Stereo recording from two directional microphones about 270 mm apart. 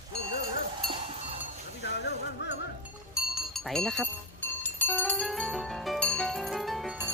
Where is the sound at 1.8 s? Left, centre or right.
Left.